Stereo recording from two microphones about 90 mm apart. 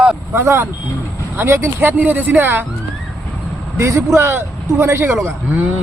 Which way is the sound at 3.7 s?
35° right (ahead or behind).